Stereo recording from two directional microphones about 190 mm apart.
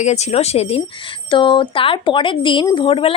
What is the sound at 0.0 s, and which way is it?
A woman's voice, 35° left (ahead or behind).